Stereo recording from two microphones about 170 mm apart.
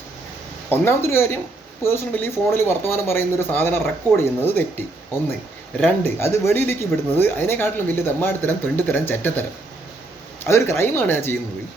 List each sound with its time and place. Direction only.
0.7 s speech: 15° left (ahead or behind)
5.8 s speech: 15° left (ahead or behind)
10.4 s speech: 15° left (ahead or behind)